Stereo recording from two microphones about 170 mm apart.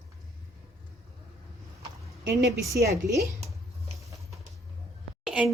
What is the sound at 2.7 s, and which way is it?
Speech, 20° right (ahead or behind).